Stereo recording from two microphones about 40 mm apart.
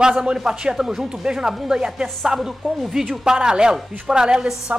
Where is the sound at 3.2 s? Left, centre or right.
Centre.